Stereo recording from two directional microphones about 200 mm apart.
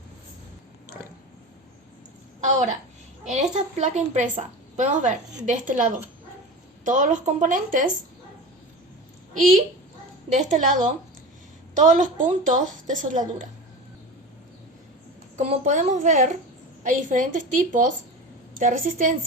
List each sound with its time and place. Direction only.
3.2 s a woman's voice: 35° right (ahead or behind)
9.3 s a woman's voice: 40° right (ahead or behind)
15.4 s a woman's voice: 35° right (ahead or behind)